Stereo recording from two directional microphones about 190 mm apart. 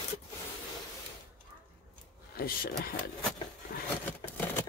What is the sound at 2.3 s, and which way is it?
Speech, 50° left (ahead or behind).